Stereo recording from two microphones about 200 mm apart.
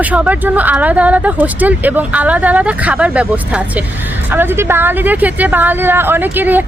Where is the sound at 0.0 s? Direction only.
10° right (ahead or behind).